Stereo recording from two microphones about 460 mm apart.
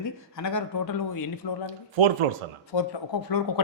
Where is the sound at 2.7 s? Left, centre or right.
Left.